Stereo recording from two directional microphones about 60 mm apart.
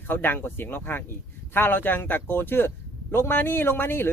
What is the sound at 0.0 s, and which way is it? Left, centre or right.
Speech, left.